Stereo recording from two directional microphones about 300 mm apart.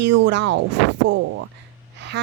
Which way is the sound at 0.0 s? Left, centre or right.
Right.